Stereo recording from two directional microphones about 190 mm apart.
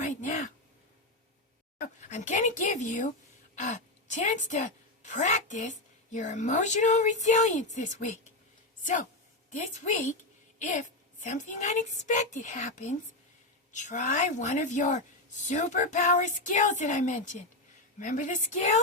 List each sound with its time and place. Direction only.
0.0 s a sound: 40° left (ahead or behind)
2.0 s a woman's voice: 40° left (ahead or behind)
9.5 s a woman's voice: 40° left (ahead or behind)